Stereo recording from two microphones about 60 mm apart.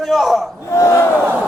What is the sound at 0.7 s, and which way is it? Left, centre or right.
Battle cry, left.